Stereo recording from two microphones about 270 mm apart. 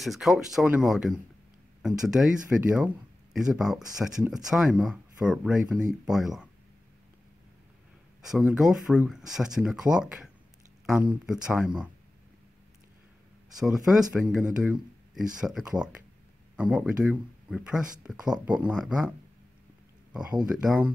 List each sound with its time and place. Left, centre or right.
0.0 s speech: centre
8.2 s speech: centre
13.6 s speech: centre
20.1 s a sound: centre
20.4 s speech: centre